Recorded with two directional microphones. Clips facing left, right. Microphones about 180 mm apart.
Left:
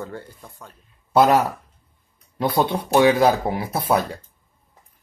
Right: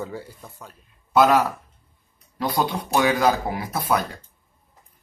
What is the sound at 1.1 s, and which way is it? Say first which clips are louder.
Speech: left 1 dB; 25° left (ahead or behind).